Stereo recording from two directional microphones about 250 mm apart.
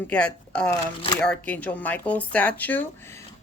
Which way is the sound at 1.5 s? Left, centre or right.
Centre.